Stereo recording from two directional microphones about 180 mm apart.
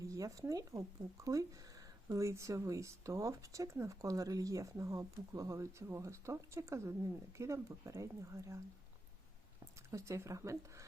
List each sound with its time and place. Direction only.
0.0 s speech: 15° right (ahead or behind)
9.9 s speech: 15° right (ahead or behind)